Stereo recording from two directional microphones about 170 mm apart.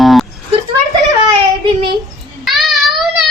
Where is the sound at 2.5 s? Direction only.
Centre (ahead or behind).